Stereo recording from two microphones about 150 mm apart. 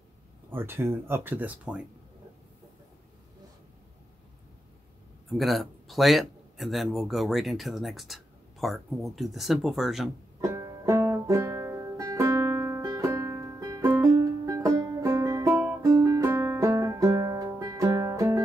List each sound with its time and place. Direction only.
0.5 s speech: 15° right (ahead or behind)
5.3 s speech: centre (ahead or behind)
10.4 s music: 20° right (ahead or behind)